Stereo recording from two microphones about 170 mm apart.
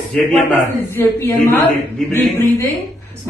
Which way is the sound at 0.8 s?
15° left (ahead or behind).